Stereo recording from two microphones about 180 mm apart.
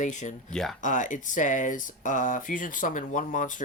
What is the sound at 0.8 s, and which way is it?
Speech, 45° left (ahead or behind).